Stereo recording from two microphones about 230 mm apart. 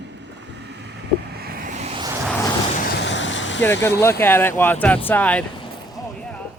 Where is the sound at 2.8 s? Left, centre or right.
Left.